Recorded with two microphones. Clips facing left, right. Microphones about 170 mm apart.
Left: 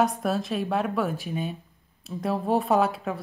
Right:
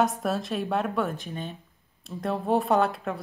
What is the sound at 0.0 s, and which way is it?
Speech, centre (ahead or behind).